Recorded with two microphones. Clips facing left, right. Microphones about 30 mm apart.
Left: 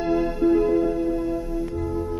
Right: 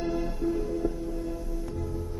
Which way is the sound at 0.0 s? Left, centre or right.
Left.